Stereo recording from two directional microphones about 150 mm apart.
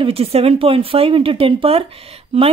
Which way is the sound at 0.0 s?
40° right (ahead or behind).